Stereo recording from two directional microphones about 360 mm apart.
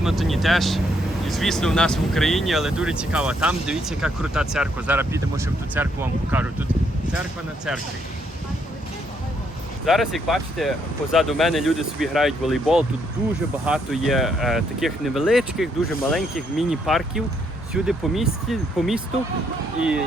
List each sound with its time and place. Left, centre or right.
0.0 s speech: centre
9.8 s speech: centre